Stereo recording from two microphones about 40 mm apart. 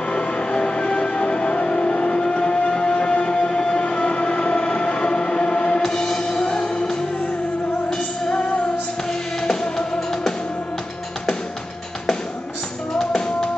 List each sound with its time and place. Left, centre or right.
0.1 s music: left
5.8 s music: centre
6.4 s music: left
9.4 s music: centre